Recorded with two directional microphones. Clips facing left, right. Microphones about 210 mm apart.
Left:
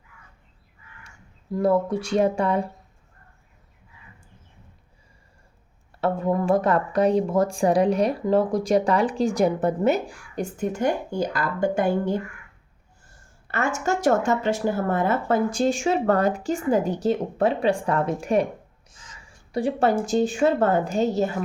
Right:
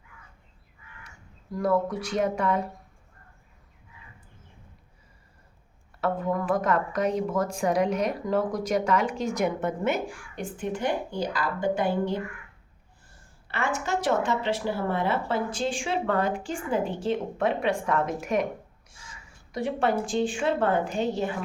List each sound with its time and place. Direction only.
1.5 s speech: 25° left (ahead or behind)
6.0 s speech: 30° left (ahead or behind); by 12.2 s 45° left (ahead or behind)
13.5 s speech: 45° left (ahead or behind)
19.5 s speech: 35° left (ahead or behind)